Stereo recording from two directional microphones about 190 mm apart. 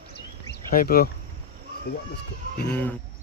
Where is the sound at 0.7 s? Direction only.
50° left (ahead or behind).